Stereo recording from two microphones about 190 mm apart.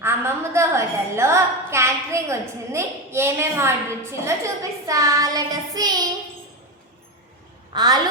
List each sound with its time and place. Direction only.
0.0 s a woman's voice: 15° right (ahead or behind)
7.7 s a woman's voice: 20° right (ahead or behind)